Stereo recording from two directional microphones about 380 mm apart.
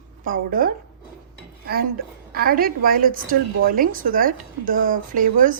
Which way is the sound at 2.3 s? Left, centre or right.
Right.